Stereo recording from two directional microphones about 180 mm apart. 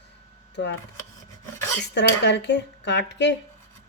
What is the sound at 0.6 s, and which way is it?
Speech, 75° left (ahead or behind).